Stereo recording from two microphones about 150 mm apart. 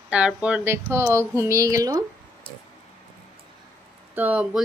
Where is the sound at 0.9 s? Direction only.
20° right (ahead or behind).